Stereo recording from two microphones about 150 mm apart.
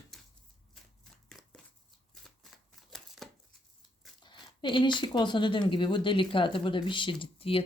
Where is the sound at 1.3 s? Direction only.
Centre (ahead or behind).